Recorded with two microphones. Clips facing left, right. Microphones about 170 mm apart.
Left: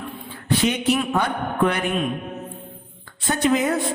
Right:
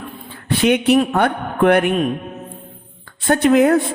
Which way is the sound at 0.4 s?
65° right (ahead or behind).